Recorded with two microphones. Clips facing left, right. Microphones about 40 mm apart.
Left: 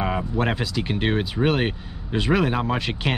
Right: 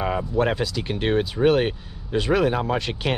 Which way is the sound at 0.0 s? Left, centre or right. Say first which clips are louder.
Right 1 dB; centre.